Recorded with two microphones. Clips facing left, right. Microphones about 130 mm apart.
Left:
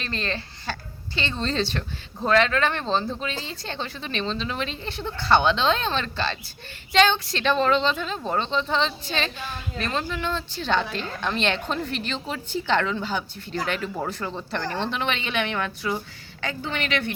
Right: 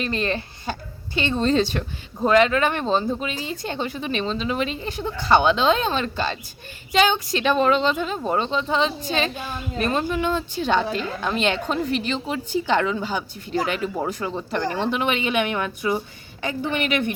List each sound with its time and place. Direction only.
0.0 s speech: 10° right (ahead or behind)